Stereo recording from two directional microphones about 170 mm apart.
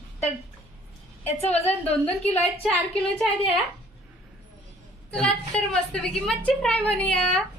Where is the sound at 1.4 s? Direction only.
40° left (ahead or behind).